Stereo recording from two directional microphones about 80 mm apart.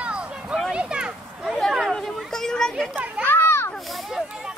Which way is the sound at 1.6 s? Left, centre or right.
Centre.